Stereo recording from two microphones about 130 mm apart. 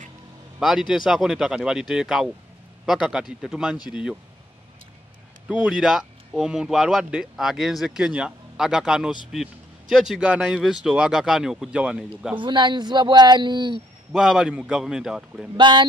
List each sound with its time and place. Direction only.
0.6 s speech: centre (ahead or behind)
5.5 s speech: 10° right (ahead or behind)
12.4 s speech: 35° right (ahead or behind)
14.1 s speech: 5° right (ahead or behind)
15.5 s speech: 35° right (ahead or behind)